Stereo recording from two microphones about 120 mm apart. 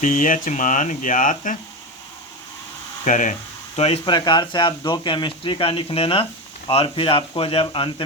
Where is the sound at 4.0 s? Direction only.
35° left (ahead or behind).